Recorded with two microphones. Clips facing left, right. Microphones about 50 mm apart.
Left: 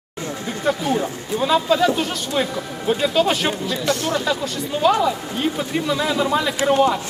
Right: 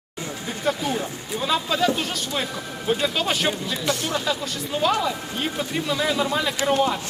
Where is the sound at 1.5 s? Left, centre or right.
Centre.